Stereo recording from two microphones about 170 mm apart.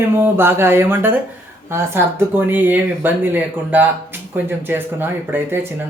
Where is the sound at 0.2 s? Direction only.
15° right (ahead or behind).